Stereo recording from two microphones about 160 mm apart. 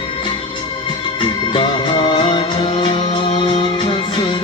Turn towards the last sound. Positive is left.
turn(degrees=30)  # may be behind; listen again after turning